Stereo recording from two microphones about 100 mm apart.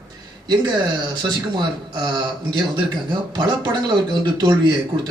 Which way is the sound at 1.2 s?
45° right (ahead or behind).